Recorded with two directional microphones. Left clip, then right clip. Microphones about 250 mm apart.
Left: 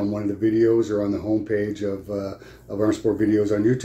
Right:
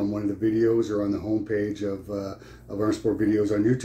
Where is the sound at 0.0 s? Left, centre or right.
Centre.